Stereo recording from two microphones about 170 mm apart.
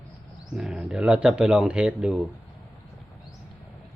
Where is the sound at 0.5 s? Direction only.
5° right (ahead or behind).